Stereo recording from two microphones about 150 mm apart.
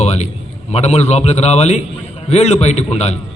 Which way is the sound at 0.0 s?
45° left (ahead or behind).